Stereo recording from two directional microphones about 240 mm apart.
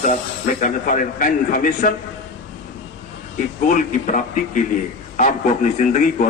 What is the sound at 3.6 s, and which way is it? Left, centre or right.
A man's voice, left.